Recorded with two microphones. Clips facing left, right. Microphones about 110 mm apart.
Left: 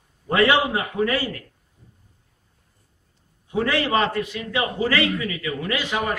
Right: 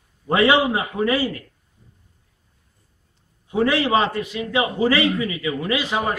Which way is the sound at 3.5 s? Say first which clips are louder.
Right 3 dB; 20° right (ahead or behind).